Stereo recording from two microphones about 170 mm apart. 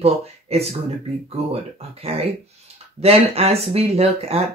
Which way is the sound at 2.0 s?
35° right (ahead or behind).